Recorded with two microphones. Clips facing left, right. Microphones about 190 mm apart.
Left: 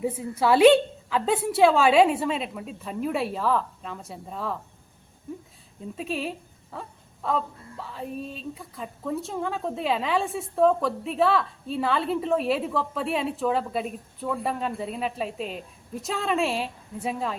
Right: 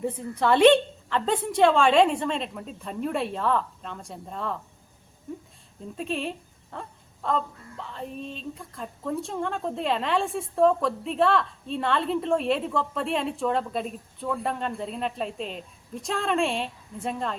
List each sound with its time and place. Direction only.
0.0 s a woman's voice: 5° left (ahead or behind)
5.3 s a sound: centre (ahead or behind)
6.0 s a woman's voice: 5° left (ahead or behind)